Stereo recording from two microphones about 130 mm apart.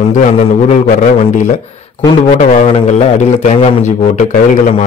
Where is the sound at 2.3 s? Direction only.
60° left (ahead or behind).